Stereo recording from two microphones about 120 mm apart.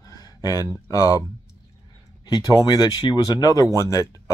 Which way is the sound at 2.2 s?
35° left (ahead or behind).